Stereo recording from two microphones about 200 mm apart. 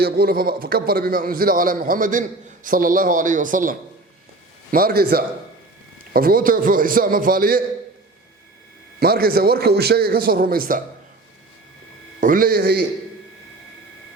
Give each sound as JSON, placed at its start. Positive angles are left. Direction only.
{"t": 0.0, "sound": "a man's voice", "side_deg": -50}
{"t": 9.0, "sound": "a man's voice", "side_deg": -50}
{"t": 12.2, "sound": "a man's voice", "side_deg": -45}